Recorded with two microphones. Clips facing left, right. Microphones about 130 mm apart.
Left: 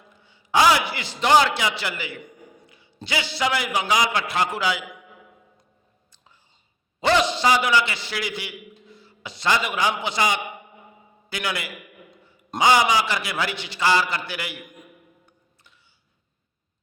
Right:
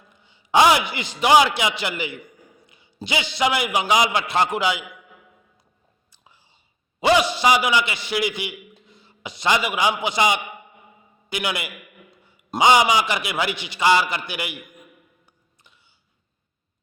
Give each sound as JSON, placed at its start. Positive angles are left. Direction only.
{"t": 0.1, "sound": "a man's voice", "side_deg": -20}
{"t": 7.0, "sound": "a man's voice", "side_deg": -10}